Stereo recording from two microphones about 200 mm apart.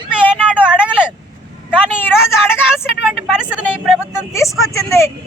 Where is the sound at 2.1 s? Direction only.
Centre (ahead or behind).